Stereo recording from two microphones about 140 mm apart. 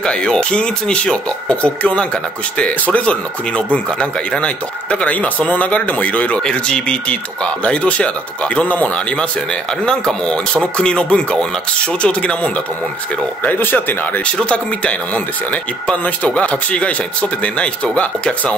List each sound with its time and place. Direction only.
0.0 s speech: 5° left (ahead or behind)
13.4 s speech: 10° left (ahead or behind)